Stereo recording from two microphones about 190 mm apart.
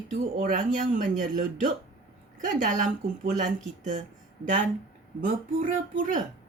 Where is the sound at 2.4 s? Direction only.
45° right (ahead or behind).